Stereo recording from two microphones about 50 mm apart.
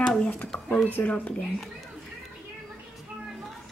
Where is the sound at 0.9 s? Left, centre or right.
Left.